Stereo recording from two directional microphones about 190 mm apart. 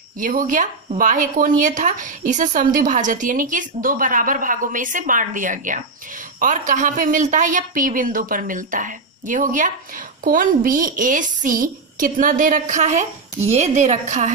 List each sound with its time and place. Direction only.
0.2 s a woman's voice: 45° right (ahead or behind)